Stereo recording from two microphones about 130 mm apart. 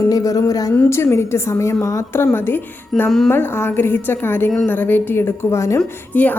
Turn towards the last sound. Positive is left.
turn(degrees=10)  # may be behind; listen again after turning